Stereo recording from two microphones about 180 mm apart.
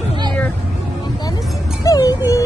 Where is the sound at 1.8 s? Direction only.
20° left (ahead or behind).